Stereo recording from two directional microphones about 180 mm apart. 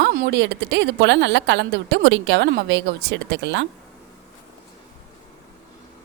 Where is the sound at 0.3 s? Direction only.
80° right.